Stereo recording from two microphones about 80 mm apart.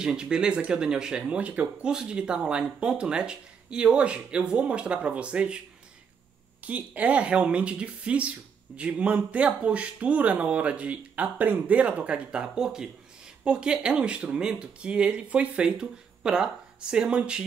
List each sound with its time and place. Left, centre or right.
0.0 s speech: centre
6.6 s speech: centre